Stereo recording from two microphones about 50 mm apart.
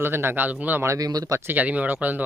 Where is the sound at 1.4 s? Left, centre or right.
Right.